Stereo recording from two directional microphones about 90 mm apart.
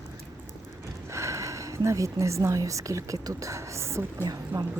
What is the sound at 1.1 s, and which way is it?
A woman's voice, 35° right (ahead or behind).